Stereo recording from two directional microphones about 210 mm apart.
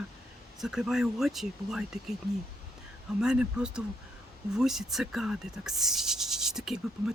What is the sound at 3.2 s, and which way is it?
Speech, 5° right (ahead or behind).